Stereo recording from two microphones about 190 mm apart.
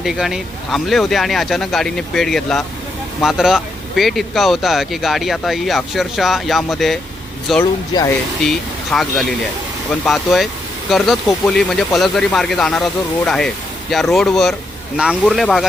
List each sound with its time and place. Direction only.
0.0 s speech: centre (ahead or behind)
7.9 s speech: 20° left (ahead or behind)
8.4 s speech: centre (ahead or behind)